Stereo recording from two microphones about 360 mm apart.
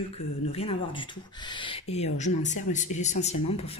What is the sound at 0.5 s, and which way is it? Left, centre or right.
Speech, centre.